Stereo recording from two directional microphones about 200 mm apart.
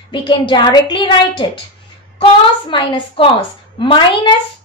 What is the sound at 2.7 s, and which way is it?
A child's voice, 25° left (ahead or behind).